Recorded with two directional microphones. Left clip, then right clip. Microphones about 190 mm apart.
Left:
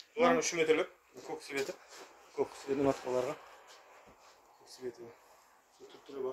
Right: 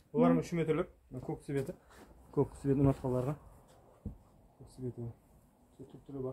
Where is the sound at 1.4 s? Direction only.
5° left (ahead or behind).